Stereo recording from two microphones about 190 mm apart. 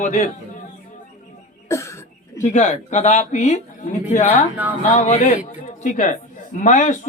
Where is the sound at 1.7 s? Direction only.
15° left (ahead or behind).